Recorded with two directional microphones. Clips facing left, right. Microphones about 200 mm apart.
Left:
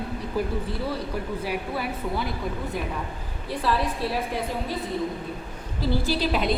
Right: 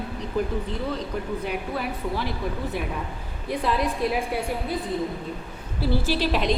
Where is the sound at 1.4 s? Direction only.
5° left (ahead or behind).